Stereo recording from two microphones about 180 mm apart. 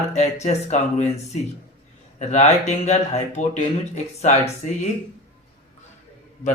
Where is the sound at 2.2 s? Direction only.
40° left (ahead or behind).